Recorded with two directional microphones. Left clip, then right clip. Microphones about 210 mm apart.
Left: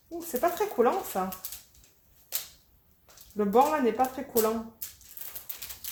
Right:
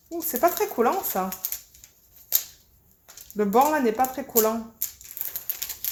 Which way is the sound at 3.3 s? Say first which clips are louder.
Right 3 dB; 45° right (ahead or behind).